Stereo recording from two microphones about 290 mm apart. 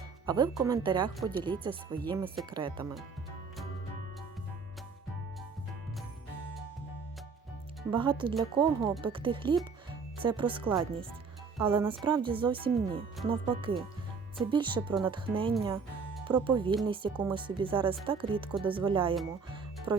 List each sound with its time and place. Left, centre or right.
0.3 s speech: centre
7.9 s speech: centre
19.5 s music: centre